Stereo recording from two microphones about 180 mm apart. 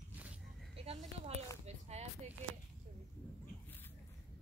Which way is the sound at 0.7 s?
35° right (ahead or behind).